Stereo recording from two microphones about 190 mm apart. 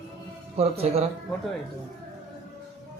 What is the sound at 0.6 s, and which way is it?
Speech, 30° right (ahead or behind).